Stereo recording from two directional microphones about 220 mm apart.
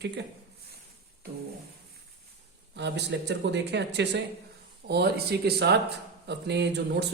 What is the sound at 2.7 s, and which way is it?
A man's voice, 50° right (ahead or behind).